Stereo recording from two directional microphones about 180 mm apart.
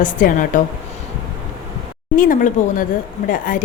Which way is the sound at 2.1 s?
50° left (ahead or behind).